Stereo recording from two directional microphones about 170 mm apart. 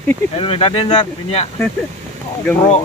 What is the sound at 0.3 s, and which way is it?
Speech, 35° left (ahead or behind).